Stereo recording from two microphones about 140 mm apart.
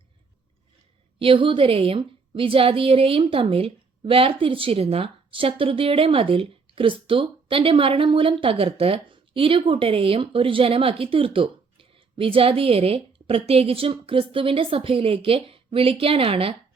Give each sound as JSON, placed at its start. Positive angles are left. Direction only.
{"t": 1.2, "sound": "speech", "side_deg": -40}